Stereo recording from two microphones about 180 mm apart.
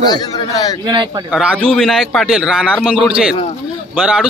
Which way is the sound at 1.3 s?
5° right (ahead or behind).